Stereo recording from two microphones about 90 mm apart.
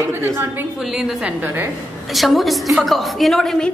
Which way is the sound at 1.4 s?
25° right (ahead or behind).